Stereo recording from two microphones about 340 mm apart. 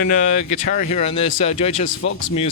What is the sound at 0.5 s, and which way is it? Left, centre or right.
Speech, left.